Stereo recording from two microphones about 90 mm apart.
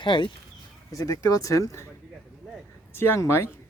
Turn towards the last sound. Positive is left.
turn(degrees=30)  # may be behind; listen again after turning